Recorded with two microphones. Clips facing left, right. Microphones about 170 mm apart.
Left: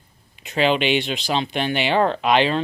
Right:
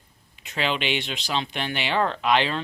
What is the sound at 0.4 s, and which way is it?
Speech, 20° left (ahead or behind).